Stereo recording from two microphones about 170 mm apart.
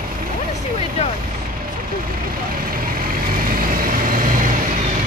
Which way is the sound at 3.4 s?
55° right (ahead or behind).